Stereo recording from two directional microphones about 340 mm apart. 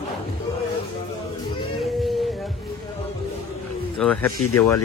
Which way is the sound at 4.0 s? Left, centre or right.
Centre.